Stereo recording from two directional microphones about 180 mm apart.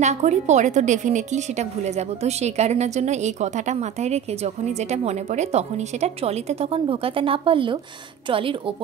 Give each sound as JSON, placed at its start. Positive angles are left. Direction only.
{"t": 0.0, "sound": "a woman's voice", "side_deg": -40}